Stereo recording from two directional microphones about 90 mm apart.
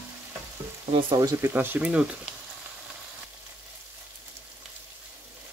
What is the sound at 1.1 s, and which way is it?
Speech, 40° right (ahead or behind).